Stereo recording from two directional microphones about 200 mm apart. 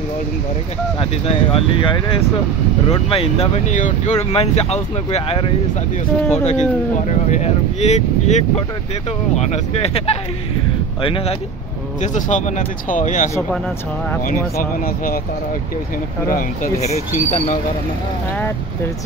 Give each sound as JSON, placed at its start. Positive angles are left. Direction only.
{"t": 0.9, "sound": "speech", "side_deg": 30}
{"t": 12.0, "sound": "speech", "side_deg": 40}
{"t": 16.3, "sound": "speech", "side_deg": 45}